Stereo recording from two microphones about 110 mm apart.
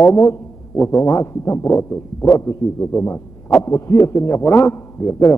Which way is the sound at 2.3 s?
30° left (ahead or behind).